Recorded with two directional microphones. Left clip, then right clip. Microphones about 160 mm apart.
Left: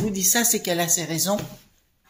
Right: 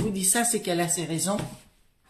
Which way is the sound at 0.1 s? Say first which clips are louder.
Left 7 dB; 45° left (ahead or behind).